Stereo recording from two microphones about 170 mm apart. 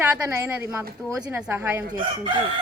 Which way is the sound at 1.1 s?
5° right (ahead or behind).